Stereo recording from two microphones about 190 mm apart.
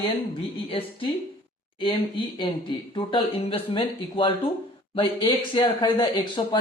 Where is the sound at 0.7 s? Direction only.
30° left (ahead or behind).